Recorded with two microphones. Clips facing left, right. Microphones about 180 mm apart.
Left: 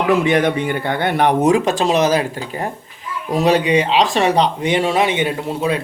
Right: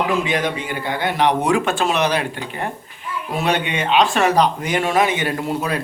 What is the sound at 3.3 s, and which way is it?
Speech, 35° left (ahead or behind).